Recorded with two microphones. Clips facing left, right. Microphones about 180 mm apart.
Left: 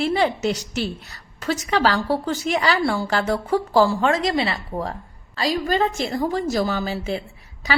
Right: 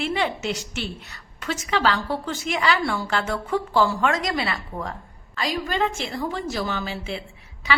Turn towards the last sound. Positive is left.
turn(degrees=40)  # may be behind; listen again after turning